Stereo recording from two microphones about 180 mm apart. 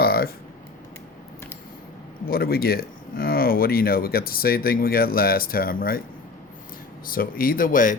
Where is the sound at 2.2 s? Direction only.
55° left (ahead or behind).